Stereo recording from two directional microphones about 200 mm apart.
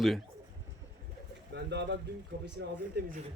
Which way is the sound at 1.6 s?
60° right (ahead or behind).